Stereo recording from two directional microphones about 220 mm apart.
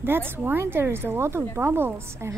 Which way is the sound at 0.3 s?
10° right (ahead or behind).